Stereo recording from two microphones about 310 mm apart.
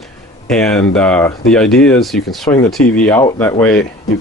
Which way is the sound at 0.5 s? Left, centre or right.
Centre.